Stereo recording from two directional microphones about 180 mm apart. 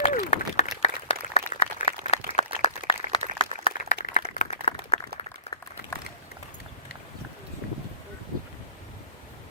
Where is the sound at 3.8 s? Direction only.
45° left (ahead or behind).